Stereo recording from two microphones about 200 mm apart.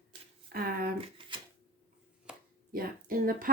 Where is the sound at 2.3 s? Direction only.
5° right (ahead or behind).